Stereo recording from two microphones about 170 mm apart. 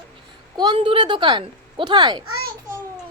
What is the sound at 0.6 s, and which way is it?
Speech, 30° right (ahead or behind).